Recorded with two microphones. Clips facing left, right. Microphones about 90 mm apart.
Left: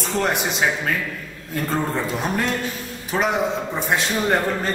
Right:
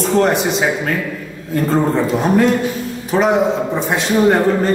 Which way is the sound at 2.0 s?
5° right (ahead or behind).